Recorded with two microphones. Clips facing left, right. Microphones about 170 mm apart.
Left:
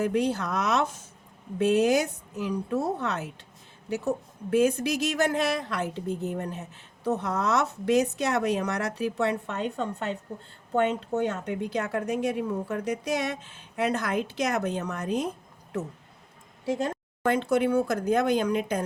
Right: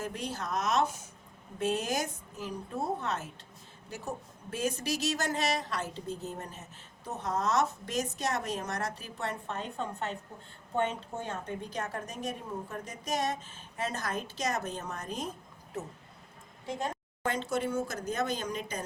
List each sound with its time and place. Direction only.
0.0 s a woman's voice: 65° left (ahead or behind); by 10.2 s 90° left
10.8 s a woman's voice: 75° left (ahead or behind)
17.2 s speech: 60° left (ahead or behind)